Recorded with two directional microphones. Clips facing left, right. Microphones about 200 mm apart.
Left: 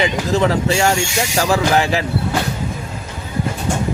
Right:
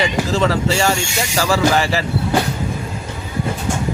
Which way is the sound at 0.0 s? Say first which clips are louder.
Left 1 dB; 15° left (ahead or behind).